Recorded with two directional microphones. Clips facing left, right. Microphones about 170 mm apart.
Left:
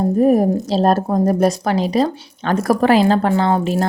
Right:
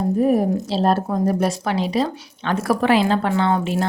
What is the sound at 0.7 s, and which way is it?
Speech, 40° left (ahead or behind).